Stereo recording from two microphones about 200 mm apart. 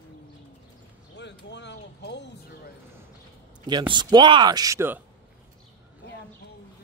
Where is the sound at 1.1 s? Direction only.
60° left (ahead or behind).